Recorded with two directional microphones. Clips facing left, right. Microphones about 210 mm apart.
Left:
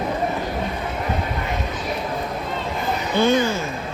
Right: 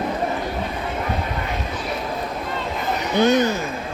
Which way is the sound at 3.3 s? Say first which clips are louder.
Right 1 dB; 15° right (ahead or behind).